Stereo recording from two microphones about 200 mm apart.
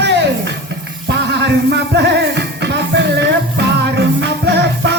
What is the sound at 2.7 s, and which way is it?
Music, 60° right (ahead or behind).